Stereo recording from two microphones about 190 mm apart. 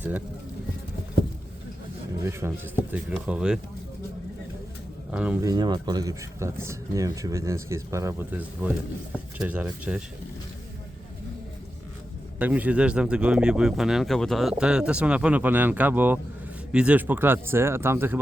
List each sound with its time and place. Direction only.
2.4 s speech: 10° right (ahead or behind)
5.1 s speech: 5° right (ahead or behind)
5.5 s speech: 20° right (ahead or behind); by 10.0 s 5° right (ahead or behind)
12.4 s speech: 10° right (ahead or behind)